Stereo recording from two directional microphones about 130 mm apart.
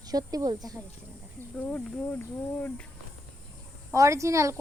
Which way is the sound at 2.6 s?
15° left (ahead or behind).